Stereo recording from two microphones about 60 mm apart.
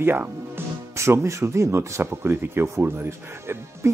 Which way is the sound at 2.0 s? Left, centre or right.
Right.